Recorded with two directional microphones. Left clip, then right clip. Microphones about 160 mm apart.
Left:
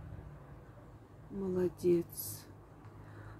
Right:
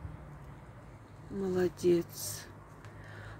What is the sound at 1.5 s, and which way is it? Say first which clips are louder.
Speech: right 2 dB; 5° left (ahead or behind).